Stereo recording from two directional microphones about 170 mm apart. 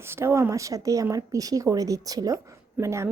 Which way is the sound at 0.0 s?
15° right (ahead or behind).